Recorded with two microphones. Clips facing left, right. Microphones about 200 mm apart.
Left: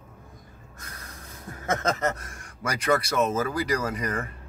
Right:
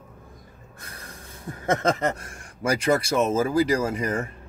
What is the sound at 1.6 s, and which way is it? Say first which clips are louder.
Speech: right 3 dB; 30° right (ahead or behind).